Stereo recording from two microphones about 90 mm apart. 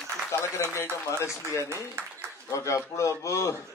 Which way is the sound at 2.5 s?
35° left (ahead or behind).